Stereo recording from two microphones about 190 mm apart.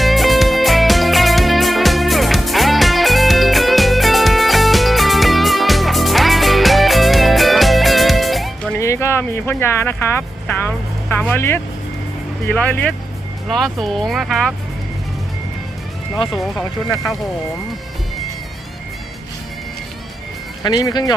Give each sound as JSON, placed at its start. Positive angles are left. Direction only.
{"t": 0.0, "sound": "music", "side_deg": 0}
{"t": 8.7, "sound": "music", "side_deg": 15}
{"t": 12.5, "sound": "speech", "side_deg": 10}
{"t": 16.2, "sound": "speech", "side_deg": 0}
{"t": 20.7, "sound": "speech", "side_deg": 20}